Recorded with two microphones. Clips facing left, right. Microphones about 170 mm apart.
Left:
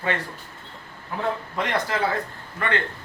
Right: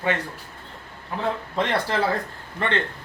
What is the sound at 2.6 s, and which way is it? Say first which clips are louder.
Speech: right 1 dB; 25° right (ahead or behind).